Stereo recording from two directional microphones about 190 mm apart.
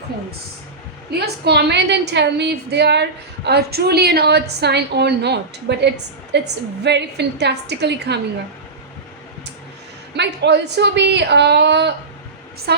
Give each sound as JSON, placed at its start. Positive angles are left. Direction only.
{"t": 1.2, "sound": "a woman's voice", "side_deg": -60}
{"t": 10.2, "sound": "a woman's voice", "side_deg": -65}